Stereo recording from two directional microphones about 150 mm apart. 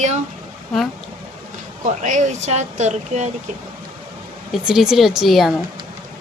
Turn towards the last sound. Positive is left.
turn(degrees=0)  # may be behind; listen again after turning